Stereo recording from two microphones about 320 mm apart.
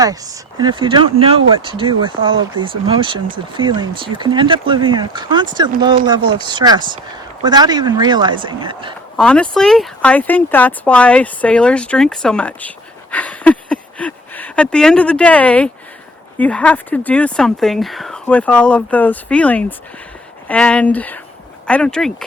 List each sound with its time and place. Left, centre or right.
0.6 s speech: centre
9.1 s speech: centre